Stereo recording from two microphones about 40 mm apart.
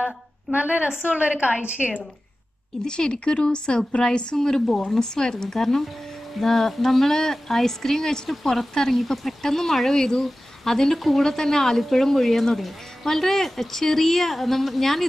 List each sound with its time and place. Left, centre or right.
0.0 s a woman's voice: right
2.8 s a woman's voice: left; by 15.0 s centre